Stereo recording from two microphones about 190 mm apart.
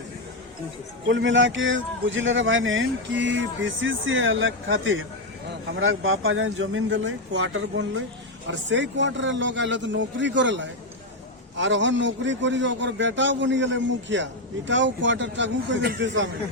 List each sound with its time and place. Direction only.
1.0 s a man's voice: 75° right (ahead or behind)